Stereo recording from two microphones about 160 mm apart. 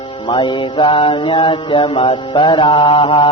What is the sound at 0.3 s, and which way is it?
A man's voice, 30° left (ahead or behind).